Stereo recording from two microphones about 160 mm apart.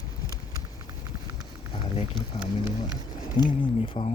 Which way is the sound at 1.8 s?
30° left (ahead or behind).